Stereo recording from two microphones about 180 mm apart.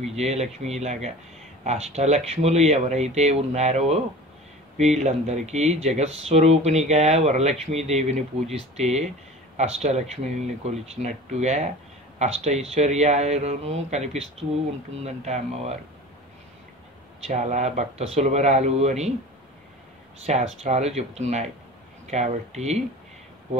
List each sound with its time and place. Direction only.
0.0 s speech: 35° right (ahead or behind)
17.2 s speech: 40° right (ahead or behind)
20.2 s speech: 40° right (ahead or behind)